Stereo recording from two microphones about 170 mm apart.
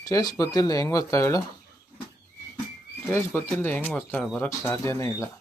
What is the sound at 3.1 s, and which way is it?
Speech, 15° left (ahead or behind).